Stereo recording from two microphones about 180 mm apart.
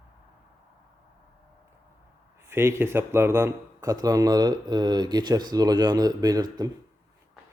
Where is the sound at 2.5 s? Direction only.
15° right (ahead or behind).